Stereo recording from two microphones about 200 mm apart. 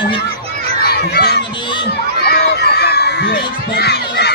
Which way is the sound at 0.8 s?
55° left (ahead or behind).